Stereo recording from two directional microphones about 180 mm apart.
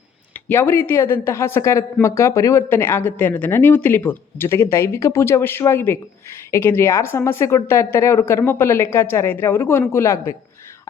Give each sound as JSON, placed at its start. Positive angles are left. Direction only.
{"t": 0.3, "sound": "speech", "side_deg": 10}